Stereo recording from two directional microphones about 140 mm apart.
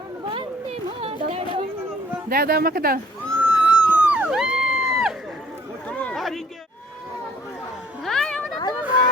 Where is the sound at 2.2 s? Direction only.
90° right.